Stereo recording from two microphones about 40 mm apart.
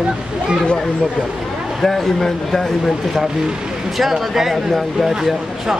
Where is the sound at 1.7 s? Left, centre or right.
Centre.